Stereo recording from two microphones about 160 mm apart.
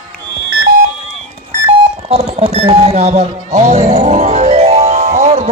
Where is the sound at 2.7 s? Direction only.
35° right (ahead or behind).